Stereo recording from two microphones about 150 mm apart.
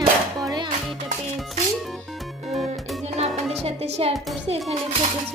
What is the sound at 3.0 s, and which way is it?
Music, 45° right (ahead or behind).